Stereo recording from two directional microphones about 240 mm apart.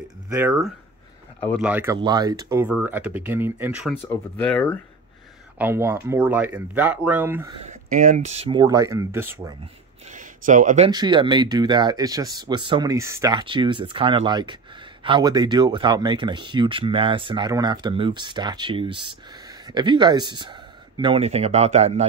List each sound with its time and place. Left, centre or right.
0.3 s speech: centre
5.6 s speech: centre
7.6 s speech: right; by 9.6 s centre
10.0 s speech: right
10.9 s speech: centre